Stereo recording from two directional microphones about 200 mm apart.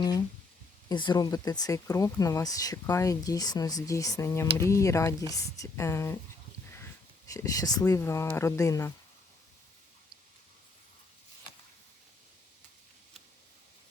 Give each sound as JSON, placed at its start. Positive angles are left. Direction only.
{"t": 0.9, "sound": "speech", "side_deg": 20}
{"t": 7.3, "sound": "speech", "side_deg": 15}